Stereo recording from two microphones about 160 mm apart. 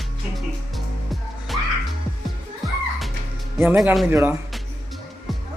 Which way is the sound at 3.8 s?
Centre (ahead or behind).